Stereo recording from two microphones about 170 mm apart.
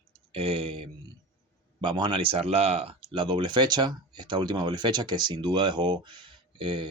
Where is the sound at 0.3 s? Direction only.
30° right (ahead or behind).